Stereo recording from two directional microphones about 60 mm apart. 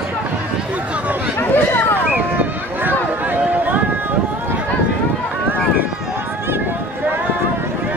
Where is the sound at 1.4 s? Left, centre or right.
Left.